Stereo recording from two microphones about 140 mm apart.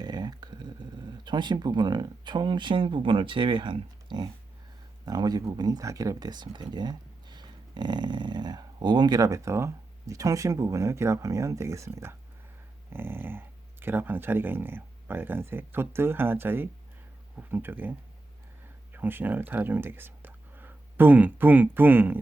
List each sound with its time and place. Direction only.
0.0 s speech: 30° right (ahead or behind)
18.9 s speech: 15° right (ahead or behind)